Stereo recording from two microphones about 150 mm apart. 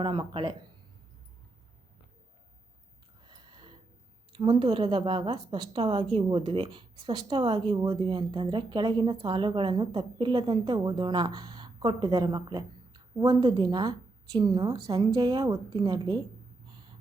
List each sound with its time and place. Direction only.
0.0 s a woman's voice: 35° right (ahead or behind)
3.2 s a sound: 30° right (ahead or behind)
4.4 s a woman's voice: 35° right (ahead or behind)
5.8 s a woman's voice: 45° right (ahead or behind); by 16.2 s 25° right (ahead or behind)